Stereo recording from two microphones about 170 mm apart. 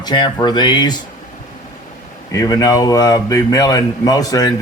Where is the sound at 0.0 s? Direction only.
25° left (ahead or behind).